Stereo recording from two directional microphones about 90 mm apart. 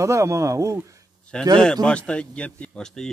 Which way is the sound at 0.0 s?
35° right (ahead or behind).